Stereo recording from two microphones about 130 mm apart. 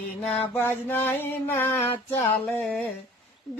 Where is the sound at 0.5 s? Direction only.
15° left (ahead or behind).